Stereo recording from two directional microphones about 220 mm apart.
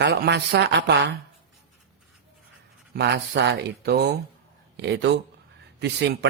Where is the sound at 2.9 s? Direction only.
50° right (ahead or behind).